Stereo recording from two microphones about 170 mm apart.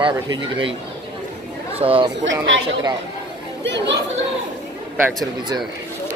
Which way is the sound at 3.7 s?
90° right.